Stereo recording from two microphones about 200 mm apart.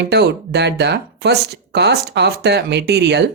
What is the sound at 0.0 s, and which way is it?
Speech, 55° right (ahead or behind).